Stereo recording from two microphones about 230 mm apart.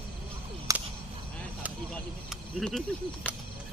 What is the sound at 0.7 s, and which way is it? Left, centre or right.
Whip, centre.